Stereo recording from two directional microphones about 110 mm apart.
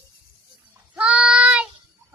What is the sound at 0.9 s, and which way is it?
Child singing, 10° right (ahead or behind).